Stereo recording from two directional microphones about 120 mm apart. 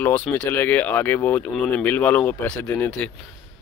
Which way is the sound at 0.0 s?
10° left (ahead or behind).